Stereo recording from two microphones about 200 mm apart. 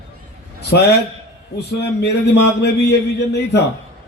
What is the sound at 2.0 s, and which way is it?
A man's voice, 55° left (ahead or behind).